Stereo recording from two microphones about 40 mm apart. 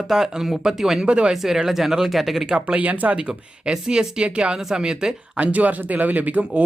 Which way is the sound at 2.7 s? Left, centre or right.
Right.